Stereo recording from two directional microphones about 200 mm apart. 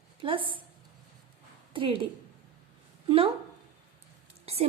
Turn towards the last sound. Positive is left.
turn(degrees=-30)  # may be behind; listen again after turning